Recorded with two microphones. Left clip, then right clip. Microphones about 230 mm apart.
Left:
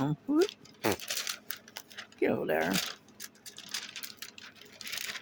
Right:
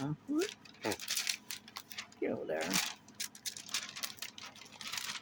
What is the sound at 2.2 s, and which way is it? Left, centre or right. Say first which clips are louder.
Mechanisms: left 8 dB; left.